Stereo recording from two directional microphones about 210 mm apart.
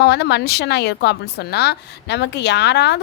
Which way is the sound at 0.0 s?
55° left (ahead or behind).